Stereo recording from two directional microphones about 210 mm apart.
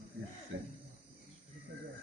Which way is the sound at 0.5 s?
65° right (ahead or behind).